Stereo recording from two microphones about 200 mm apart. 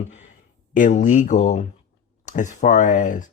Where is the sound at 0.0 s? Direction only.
35° left (ahead or behind).